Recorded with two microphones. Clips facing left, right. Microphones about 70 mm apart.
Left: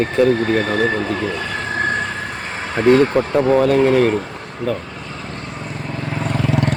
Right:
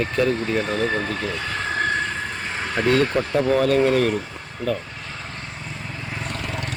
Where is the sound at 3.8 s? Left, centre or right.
Left.